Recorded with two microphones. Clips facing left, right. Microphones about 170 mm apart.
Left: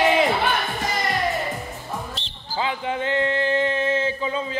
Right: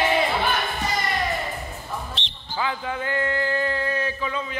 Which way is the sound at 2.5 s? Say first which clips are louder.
Left 2 dB; 25° left (ahead or behind).